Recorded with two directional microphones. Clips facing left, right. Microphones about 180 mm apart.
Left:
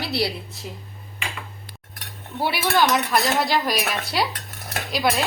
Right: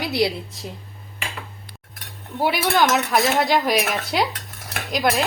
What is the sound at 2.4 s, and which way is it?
A woman's voice, 15° right (ahead or behind).